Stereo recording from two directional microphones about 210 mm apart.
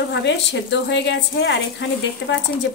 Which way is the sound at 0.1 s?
60° left (ahead or behind).